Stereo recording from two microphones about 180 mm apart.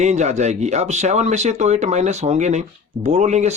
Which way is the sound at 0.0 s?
40° right (ahead or behind).